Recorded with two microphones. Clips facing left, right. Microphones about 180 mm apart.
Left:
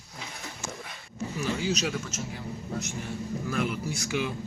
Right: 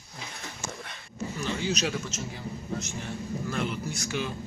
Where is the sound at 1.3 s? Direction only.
5° left (ahead or behind).